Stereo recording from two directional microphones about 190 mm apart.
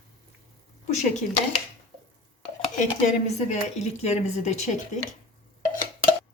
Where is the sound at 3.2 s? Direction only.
35° left (ahead or behind).